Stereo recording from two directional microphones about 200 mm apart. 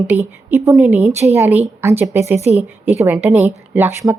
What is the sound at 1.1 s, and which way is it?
Speech, 35° right (ahead or behind).